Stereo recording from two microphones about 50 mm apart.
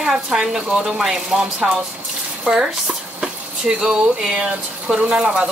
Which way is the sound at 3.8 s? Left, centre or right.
Centre.